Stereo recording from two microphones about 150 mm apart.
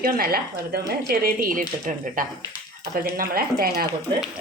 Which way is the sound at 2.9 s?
75° right (ahead or behind).